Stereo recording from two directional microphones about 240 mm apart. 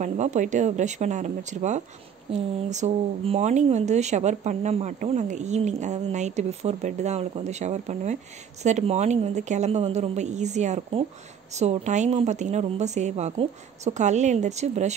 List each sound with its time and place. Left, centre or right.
0.0 s speech: right